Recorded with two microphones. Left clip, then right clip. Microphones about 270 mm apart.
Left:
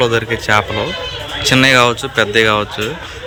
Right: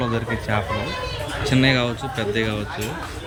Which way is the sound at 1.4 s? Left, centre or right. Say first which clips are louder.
Left 10 dB; centre.